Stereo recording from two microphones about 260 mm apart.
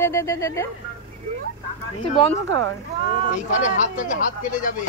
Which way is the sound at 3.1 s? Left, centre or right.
Left.